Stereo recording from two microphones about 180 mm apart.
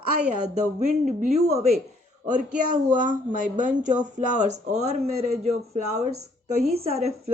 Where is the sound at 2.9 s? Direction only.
45° right (ahead or behind).